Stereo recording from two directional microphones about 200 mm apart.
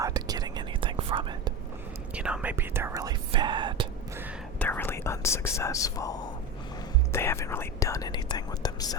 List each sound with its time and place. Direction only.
0.0 s whispering: 20° right (ahead or behind)
2.1 s speech: 5° right (ahead or behind); by 3.8 s 25° right (ahead or behind)
4.6 s speech: 10° left (ahead or behind)